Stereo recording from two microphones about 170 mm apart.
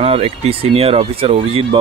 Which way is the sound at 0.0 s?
35° right (ahead or behind).